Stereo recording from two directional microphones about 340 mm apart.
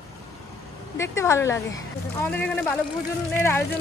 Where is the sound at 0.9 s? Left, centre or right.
Centre.